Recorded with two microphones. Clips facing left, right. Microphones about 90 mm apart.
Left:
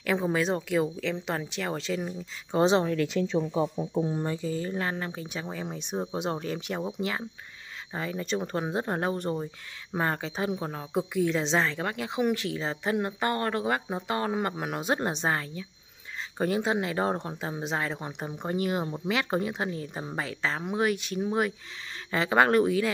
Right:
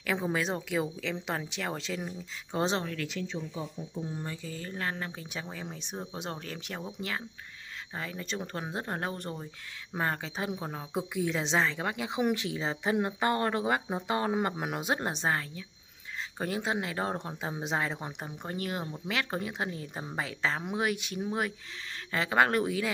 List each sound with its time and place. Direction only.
0.0 s speech: centre (ahead or behind)
2.8 s speech: 25° left (ahead or behind)
3.3 s speech: 80° left
4.4 s speech: 20° left (ahead or behind); by 15.0 s 10° right (ahead or behind)
15.0 s speech: centre (ahead or behind)
18.2 s speech: 10° left (ahead or behind)